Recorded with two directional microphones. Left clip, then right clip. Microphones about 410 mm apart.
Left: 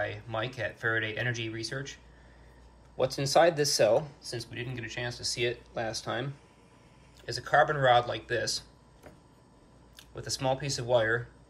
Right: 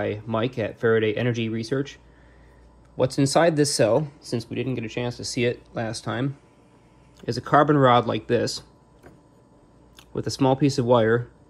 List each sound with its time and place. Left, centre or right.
0.0 s speech: centre
3.0 s speech: centre